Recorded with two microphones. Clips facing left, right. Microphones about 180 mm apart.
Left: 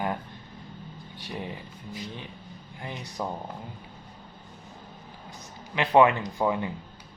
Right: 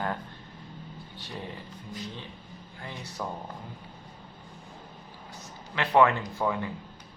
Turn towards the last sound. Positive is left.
turn(degrees=20)  # may be behind; listen again after turning